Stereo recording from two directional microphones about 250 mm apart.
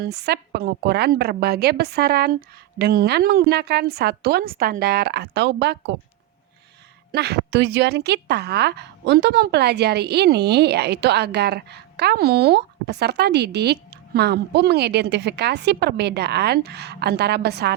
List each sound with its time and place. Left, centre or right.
0.0 s a woman's voice: right
7.1 s a woman's voice: right